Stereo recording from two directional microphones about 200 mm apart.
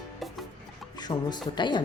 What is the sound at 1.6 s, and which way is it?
Speech, 20° left (ahead or behind).